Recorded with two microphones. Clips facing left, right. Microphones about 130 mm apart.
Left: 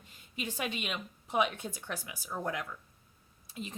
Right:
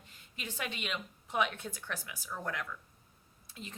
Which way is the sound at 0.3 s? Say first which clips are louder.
Left 4 dB; 15° left (ahead or behind).